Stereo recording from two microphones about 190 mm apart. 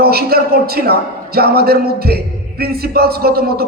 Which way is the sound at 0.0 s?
55° right (ahead or behind).